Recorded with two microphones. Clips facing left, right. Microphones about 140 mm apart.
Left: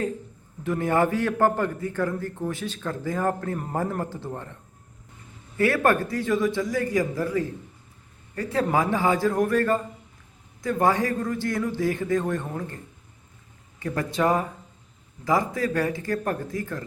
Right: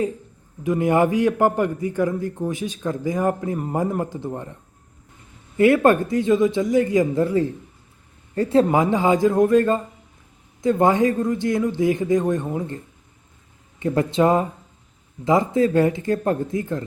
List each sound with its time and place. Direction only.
0.6 s a man's voice: 15° right (ahead or behind)
5.5 s a man's voice: 20° right (ahead or behind)
13.7 s a man's voice: 25° right (ahead or behind)